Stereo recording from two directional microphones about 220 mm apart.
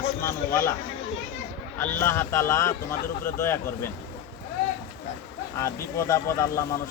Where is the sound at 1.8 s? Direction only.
10° left (ahead or behind).